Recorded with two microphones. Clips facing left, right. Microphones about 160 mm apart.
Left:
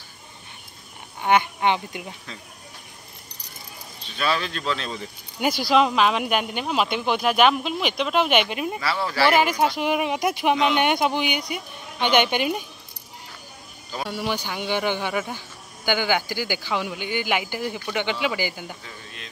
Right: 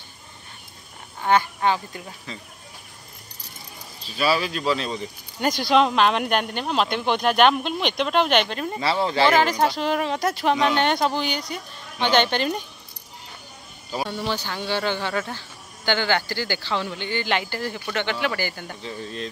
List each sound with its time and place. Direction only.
1.2 s speech: 20° left (ahead or behind)
4.0 s speech: 5° right (ahead or behind)
5.4 s speech: 5° left (ahead or behind)
8.7 s speech: 25° right (ahead or behind)
9.3 s speech: 10° left (ahead or behind)
14.0 s speech: 10° left (ahead or behind)
18.8 s speech: 30° right (ahead or behind)